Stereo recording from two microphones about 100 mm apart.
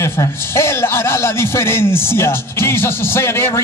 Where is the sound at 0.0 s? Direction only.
25° left (ahead or behind).